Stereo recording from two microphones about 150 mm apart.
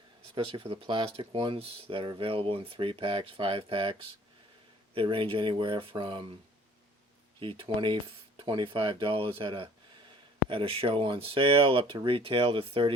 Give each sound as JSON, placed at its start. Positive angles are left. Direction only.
{"t": 0.3, "sound": "speech", "side_deg": -35}
{"t": 4.9, "sound": "speech", "side_deg": -35}
{"t": 7.3, "sound": "speech", "side_deg": -35}